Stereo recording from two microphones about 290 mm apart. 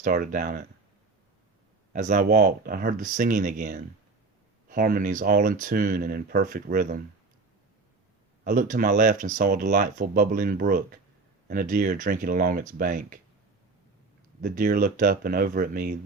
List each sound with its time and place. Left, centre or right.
0.0 s speech: right
1.9 s speech: right
8.4 s speech: right
14.4 s speech: right